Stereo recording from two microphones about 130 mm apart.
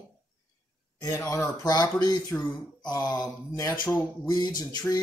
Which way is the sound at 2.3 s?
10° left (ahead or behind).